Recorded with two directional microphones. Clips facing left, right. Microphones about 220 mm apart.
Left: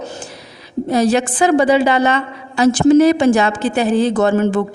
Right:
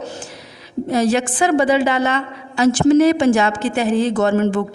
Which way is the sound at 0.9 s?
35° left (ahead or behind).